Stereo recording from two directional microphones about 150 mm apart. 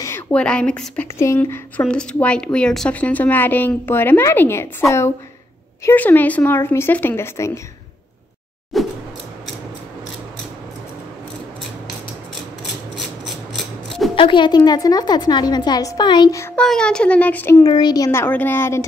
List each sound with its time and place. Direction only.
0.0 s a woman's voice: 10° left (ahead or behind)
1.2 s a woman's voice: 15° left (ahead or behind)
8.7 s a sound: centre (ahead or behind)
14.1 s a woman's voice: 35° left (ahead or behind)
16.5 s a woman's voice: 5° left (ahead or behind)
17.6 s a woman's voice: 25° left (ahead or behind)